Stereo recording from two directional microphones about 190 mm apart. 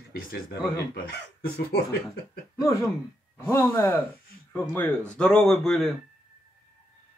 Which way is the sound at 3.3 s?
15° left (ahead or behind).